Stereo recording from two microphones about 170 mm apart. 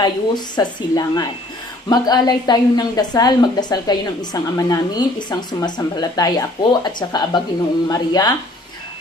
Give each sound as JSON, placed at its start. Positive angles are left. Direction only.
{"t": 0.0, "sound": "a woman's voice", "side_deg": 25}